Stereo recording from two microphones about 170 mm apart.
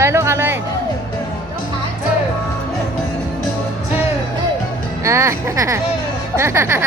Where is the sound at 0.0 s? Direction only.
15° right (ahead or behind).